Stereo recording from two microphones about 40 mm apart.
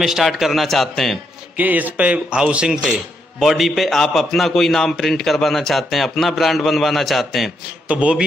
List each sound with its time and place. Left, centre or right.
0.0 s a man's voice: centre
1.6 s speech: right
3.3 s a man's voice: centre
7.9 s speech: right